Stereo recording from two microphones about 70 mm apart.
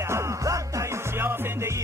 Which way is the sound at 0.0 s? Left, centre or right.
Right.